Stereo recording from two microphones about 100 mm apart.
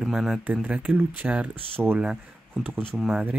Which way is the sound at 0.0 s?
5° right (ahead or behind).